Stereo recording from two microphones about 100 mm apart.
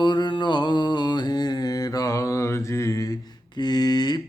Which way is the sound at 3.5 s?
45° left (ahead or behind).